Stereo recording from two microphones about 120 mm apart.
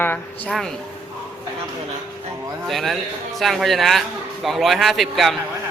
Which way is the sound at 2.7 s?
Centre (ahead or behind).